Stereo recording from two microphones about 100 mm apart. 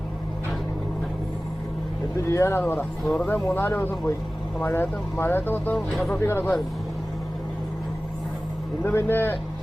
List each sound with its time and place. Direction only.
2.2 s speech: 30° left (ahead or behind)
5.7 s speech: 5° left (ahead or behind)
6.1 s speech: 20° left (ahead or behind)
8.8 s speech: 20° left (ahead or behind)